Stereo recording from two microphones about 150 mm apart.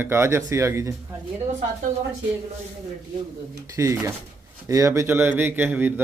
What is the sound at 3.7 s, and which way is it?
Speech, 20° right (ahead or behind).